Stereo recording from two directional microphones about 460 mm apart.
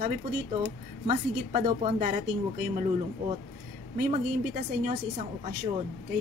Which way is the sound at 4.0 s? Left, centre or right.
Centre.